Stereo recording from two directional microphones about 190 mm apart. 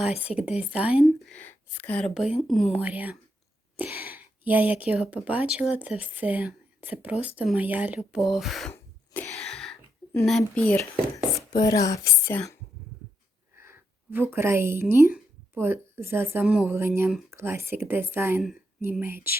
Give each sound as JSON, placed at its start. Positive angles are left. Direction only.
{"t": 0.3, "sound": "speech", "side_deg": -5}
{"t": 1.0, "sound": "speech", "side_deg": 5}
{"t": 10.2, "sound": "speech", "side_deg": 5}
{"t": 11.3, "sound": "speech", "side_deg": 20}
{"t": 13.6, "sound": "speech", "side_deg": -10}